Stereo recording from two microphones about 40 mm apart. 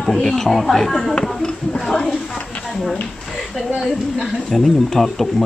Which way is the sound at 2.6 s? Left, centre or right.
Centre.